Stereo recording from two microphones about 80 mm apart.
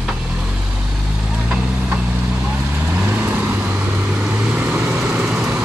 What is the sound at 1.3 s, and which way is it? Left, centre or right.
Vehicle, centre.